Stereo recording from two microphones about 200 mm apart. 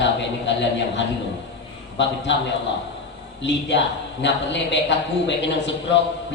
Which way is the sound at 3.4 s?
60° left (ahead or behind).